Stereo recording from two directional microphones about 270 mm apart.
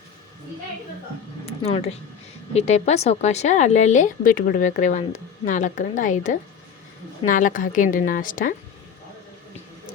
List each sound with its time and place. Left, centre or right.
1.5 s a woman's voice: left